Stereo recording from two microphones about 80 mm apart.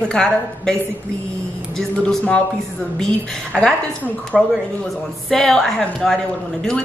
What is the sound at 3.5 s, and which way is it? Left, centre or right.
A woman's voice, centre.